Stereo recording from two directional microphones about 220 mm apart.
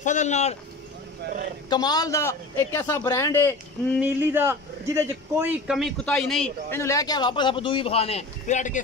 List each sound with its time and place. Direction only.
0.0 s speech: 35° left (ahead or behind)
1.2 s a man's voice: 40° right (ahead or behind)
1.7 s a man's voice: 20° left (ahead or behind)
4.0 s a man's voice: 10° right (ahead or behind); by 8.8 s 35° left (ahead or behind)